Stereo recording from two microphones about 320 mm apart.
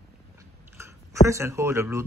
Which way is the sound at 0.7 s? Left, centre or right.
Centre.